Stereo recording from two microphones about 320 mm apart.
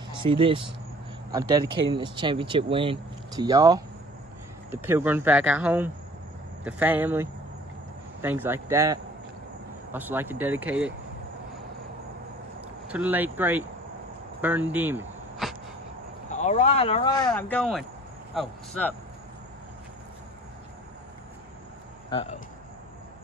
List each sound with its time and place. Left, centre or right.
0.2 s speech: centre
12.8 s speech: centre
16.3 s speech: left
17.3 s speech: centre
22.1 s speech: centre